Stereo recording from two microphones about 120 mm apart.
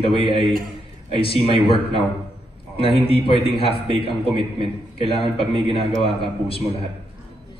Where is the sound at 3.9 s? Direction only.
40° right (ahead or behind).